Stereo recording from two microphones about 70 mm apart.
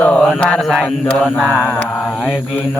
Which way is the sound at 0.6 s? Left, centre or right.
Centre.